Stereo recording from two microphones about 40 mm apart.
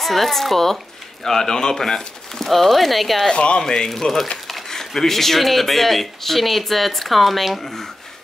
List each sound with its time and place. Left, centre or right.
0.0 s speech: centre
3.3 s speech: left
3.6 s speech: centre